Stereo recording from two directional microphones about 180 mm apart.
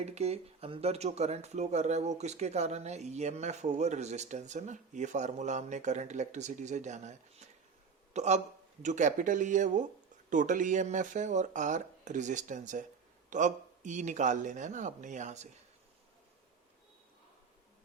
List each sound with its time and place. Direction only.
0.0 s speech: 35° right (ahead or behind)